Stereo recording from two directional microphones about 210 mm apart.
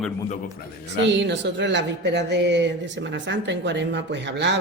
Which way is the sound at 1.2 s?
60° right (ahead or behind).